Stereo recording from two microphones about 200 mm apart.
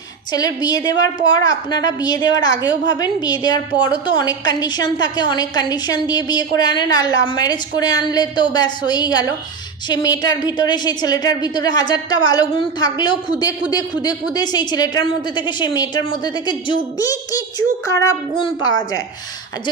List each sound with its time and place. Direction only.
0.3 s a woman's voice: 20° left (ahead or behind)